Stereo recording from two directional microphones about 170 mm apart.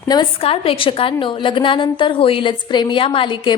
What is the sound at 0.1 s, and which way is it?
A woman's voice, 30° left (ahead or behind).